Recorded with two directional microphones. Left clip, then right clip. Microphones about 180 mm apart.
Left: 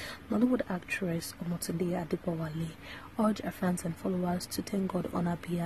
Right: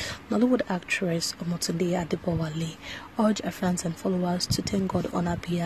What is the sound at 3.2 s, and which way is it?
A woman's voice, 10° right (ahead or behind).